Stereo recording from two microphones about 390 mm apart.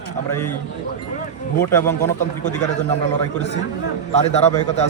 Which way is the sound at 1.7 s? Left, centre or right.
Centre.